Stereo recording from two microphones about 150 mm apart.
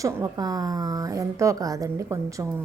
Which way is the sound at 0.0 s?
25° right (ahead or behind).